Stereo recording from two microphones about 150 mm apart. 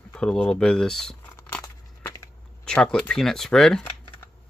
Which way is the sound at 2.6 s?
5° left (ahead or behind).